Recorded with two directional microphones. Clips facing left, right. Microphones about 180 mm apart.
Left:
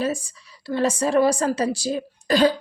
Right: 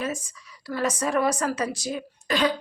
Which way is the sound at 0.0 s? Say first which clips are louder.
Left 5 dB; 30° left (ahead or behind).